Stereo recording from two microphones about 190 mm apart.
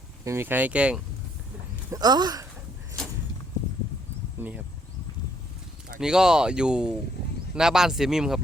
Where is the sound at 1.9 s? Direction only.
20° right (ahead or behind).